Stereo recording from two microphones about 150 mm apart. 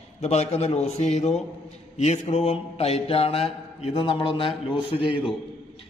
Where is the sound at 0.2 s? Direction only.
45° left (ahead or behind).